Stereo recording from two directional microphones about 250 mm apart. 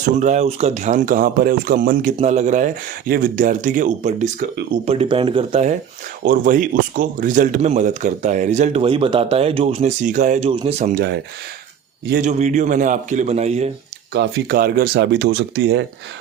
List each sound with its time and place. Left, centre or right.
0.2 s speech: right
4.9 s speech: right
12.1 s speech: right
14.1 s speech: right